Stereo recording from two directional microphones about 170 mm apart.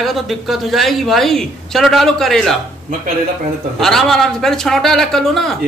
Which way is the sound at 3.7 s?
Centre (ahead or behind).